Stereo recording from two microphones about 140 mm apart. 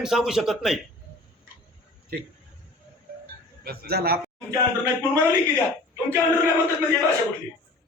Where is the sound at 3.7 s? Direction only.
90° right.